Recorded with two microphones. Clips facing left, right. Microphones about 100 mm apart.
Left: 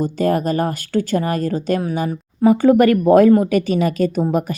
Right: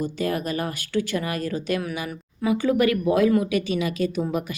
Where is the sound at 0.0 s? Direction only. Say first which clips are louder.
Left 8 dB; 40° left (ahead or behind).